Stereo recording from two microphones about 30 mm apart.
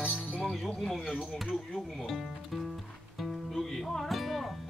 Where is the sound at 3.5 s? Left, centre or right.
Centre.